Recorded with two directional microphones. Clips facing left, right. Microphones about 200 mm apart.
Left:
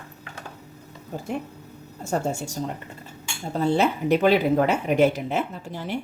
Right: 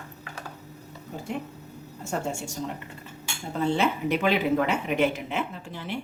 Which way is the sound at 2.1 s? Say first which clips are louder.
Left 5 dB; 40° left (ahead or behind).